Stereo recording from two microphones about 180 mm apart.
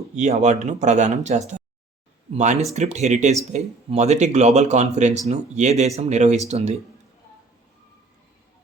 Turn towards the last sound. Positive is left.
turn(degrees=-40)  # may be behind; listen again after turning